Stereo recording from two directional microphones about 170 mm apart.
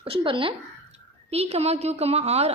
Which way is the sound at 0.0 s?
30° right (ahead or behind).